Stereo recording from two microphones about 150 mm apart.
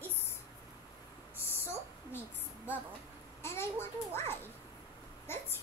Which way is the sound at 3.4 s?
15° left (ahead or behind).